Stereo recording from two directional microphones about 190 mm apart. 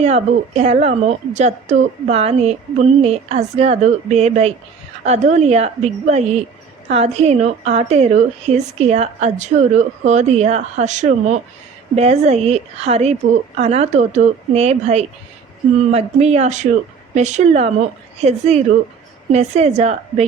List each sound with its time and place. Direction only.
0.0 s a woman's voice: 35° right (ahead or behind)